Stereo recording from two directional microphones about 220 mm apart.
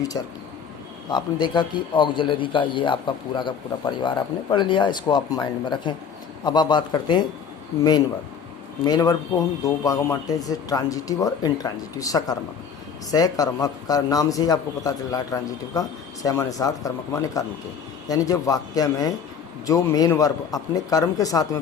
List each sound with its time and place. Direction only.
1.1 s a man's voice: 20° left (ahead or behind)
8.8 s a man's voice: 15° left (ahead or behind)